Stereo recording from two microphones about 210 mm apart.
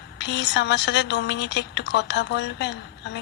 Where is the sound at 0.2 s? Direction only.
55° left (ahead or behind).